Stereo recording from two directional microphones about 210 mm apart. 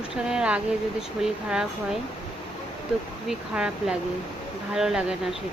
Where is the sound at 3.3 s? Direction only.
5° right (ahead or behind).